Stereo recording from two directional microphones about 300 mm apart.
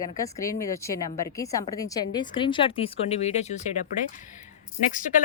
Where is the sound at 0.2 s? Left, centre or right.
Centre.